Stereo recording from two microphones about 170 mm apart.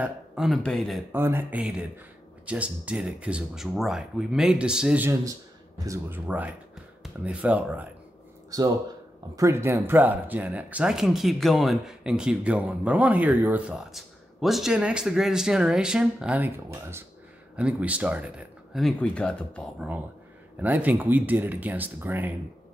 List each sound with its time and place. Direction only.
0.0 s speech: centre (ahead or behind)
1.1 s speech: 15° right (ahead or behind)
8.5 s a man's voice: 20° right (ahead or behind); by 19.9 s 5° left (ahead or behind)
20.6 s speech: 10° right (ahead or behind)